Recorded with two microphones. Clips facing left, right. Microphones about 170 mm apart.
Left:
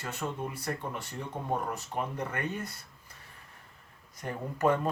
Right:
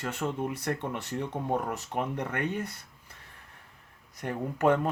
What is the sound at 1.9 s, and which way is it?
Speech, 65° right (ahead or behind).